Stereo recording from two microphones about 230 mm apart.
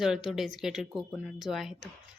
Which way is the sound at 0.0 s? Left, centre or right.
Centre.